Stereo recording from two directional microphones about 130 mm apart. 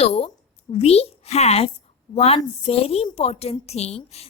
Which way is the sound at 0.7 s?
50° left (ahead or behind).